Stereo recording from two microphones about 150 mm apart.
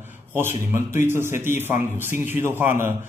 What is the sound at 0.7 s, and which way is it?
Speech, 15° right (ahead or behind).